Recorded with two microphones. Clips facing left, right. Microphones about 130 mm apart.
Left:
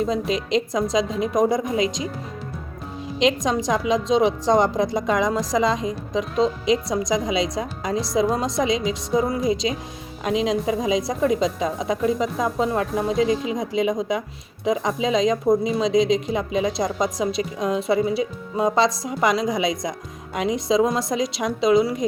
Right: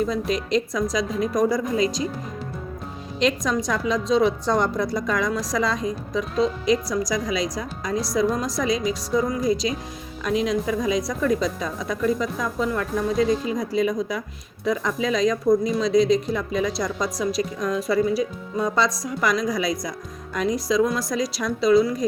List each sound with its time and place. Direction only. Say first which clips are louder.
0.0 s speech: left 1 dB; 25° left (ahead or behind)
3.2 s speech: left 2 dB; 20° left (ahead or behind)